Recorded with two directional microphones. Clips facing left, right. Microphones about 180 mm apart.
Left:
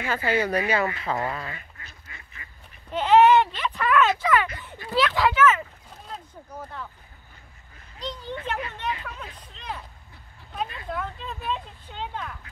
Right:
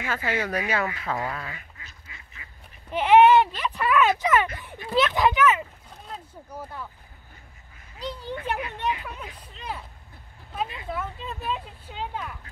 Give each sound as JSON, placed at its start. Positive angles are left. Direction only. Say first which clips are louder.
{"t": 0.4, "sound": "speech", "louder": "left 4 dB", "side_deg": 0}
{"t": 2.4, "sound": "goose", "louder": "left 1 dB", "side_deg": -10}
{"t": 2.9, "sound": "speech", "louder": "right 1 dB", "side_deg": -10}
{"t": 4.2, "sound": "speech", "louder": "even", "side_deg": -20}
{"t": 8.0, "sound": "speech", "louder": "right 1 dB", "side_deg": -10}